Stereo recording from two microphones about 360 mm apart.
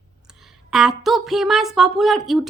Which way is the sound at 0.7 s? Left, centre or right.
Centre.